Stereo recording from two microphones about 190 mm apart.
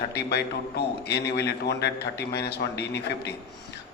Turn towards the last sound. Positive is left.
turn(degrees=60)  # may be behind; listen again after turning